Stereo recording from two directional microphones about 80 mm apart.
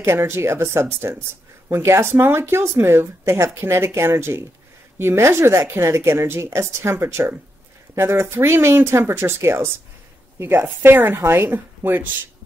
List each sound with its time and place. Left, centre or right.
0.0 s speech: right